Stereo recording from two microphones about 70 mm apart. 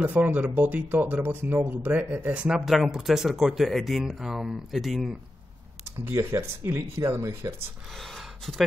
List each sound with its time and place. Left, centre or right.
0.0 s speech: right
2.6 s speech: centre
6.0 s speech: right
8.0 s a sound: centre